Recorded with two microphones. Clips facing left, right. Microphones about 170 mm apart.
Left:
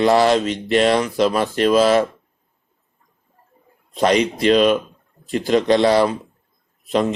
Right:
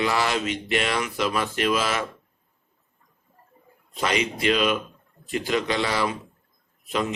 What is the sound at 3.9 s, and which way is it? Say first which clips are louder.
Speech: left 9 dB; 40° left (ahead or behind).